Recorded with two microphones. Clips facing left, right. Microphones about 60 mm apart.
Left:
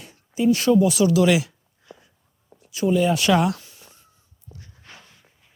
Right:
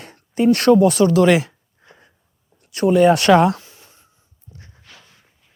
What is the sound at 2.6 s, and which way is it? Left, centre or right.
Speech, right.